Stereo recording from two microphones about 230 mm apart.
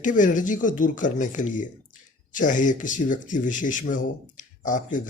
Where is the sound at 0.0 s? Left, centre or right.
Left.